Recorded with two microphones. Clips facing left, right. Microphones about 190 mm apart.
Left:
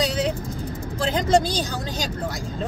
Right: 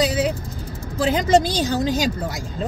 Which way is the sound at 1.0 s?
10° right (ahead or behind).